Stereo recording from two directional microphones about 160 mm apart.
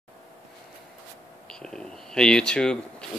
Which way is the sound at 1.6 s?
5° left (ahead or behind).